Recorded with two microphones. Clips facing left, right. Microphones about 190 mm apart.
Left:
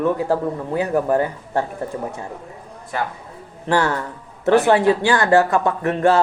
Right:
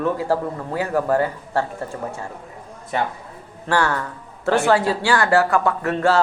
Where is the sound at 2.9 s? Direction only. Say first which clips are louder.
Right 2 dB; 20° right (ahead or behind).